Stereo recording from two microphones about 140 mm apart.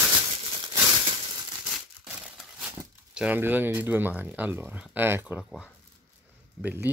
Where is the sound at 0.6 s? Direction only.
30° right (ahead or behind).